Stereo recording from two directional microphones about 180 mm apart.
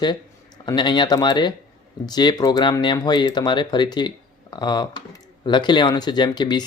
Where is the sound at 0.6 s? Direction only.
25° left (ahead or behind).